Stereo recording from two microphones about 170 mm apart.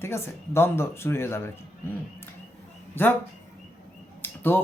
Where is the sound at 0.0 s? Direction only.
15° left (ahead or behind).